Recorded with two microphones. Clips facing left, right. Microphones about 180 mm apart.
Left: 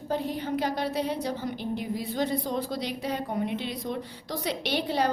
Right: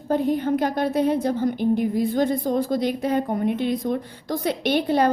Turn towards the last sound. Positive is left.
turn(degrees=-55)  # may be behind; listen again after turning